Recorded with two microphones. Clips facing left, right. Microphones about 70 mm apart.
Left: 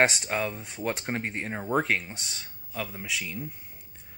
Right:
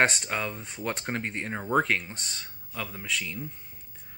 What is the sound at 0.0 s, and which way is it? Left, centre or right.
Speech, centre.